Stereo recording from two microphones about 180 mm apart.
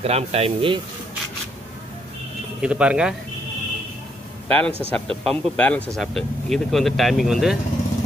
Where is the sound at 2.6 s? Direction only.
5° right (ahead or behind).